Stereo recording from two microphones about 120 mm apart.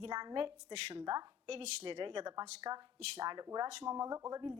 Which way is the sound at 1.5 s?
50° right (ahead or behind).